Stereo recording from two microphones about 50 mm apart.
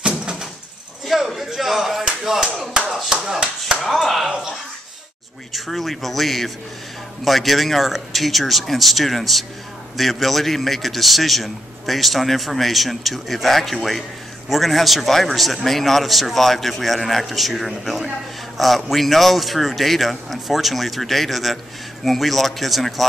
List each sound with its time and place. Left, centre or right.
0.0 s door: centre
1.0 s a man's voice: centre
3.8 s a man's voice: centre
5.5 s a man's voice: centre